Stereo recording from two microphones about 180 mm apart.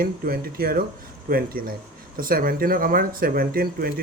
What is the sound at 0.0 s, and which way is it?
Speech, 55° right (ahead or behind).